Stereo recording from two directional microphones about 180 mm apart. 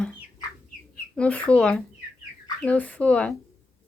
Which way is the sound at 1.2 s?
5° left (ahead or behind).